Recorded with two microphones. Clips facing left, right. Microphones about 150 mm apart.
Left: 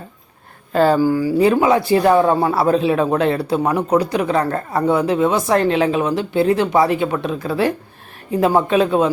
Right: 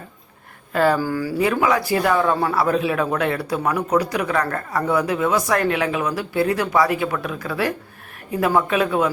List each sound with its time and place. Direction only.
0.7 s speech: 30° left (ahead or behind)
0.9 s speech: 15° left (ahead or behind)
1.5 s speech: 25° left (ahead or behind)